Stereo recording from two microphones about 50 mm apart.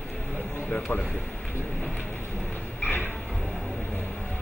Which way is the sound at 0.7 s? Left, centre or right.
Left.